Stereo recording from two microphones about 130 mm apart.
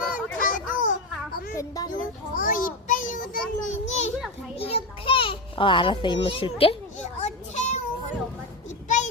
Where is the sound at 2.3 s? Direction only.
90° left.